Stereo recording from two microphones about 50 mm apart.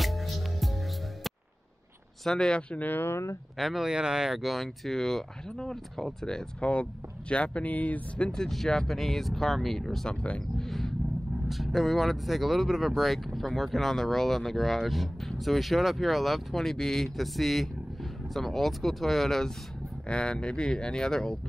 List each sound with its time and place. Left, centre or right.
0.0 s music: centre
2.2 s speech: centre
2.7 s speech: left
3.0 s speech: left
3.5 s speech: centre
3.9 s speech: centre
6.6 s speech: left
8.3 s speech: centre
10.0 s speech: left
10.6 s speech: centre
20.1 s speech: centre